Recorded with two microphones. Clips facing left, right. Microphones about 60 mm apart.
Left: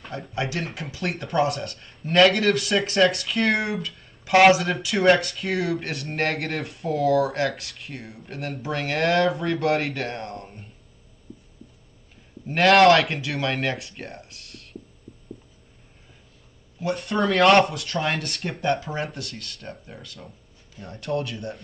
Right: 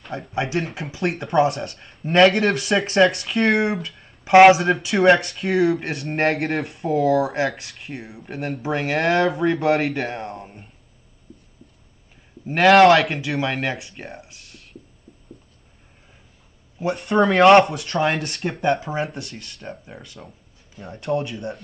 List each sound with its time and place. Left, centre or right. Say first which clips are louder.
0.0 s speech: right 3 dB; centre
4.2 s speech: right 5 dB; right
4.6 s speech: right 5 dB; centre
12.4 s speech: right 3 dB; centre
16.9 s speech: right 5 dB; centre
18.8 s speech: right 4 dB; centre